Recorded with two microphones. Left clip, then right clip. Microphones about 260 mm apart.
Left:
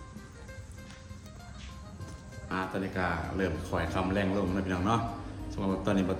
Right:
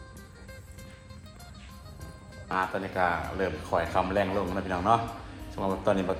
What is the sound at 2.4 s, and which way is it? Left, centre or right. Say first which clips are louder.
Speech: right 5 dB; centre.